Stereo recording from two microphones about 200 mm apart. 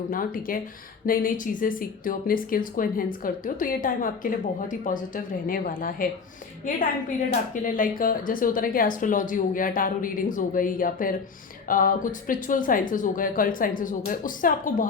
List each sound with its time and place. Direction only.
0.1 s speech: 45° left (ahead or behind)
7.5 s speech: 40° left (ahead or behind)